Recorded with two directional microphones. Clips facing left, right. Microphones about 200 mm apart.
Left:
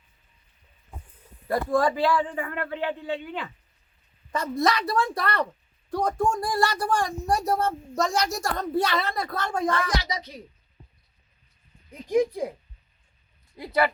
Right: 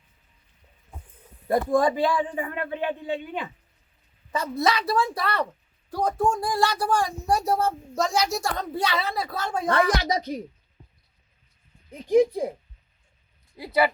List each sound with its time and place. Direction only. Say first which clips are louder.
1.5 s a man's voice: right 2 dB; 20° right (ahead or behind)
4.3 s speech: even; 5° right (ahead or behind)
9.6 s a woman's voice: right 7 dB; 60° right (ahead or behind)
13.6 s a man's voice: right 1 dB; 5° right (ahead or behind)